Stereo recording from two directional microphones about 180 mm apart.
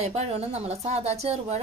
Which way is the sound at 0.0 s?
35° right (ahead or behind).